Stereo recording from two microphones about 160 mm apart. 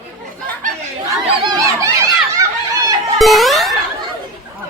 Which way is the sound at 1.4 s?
25° right (ahead or behind).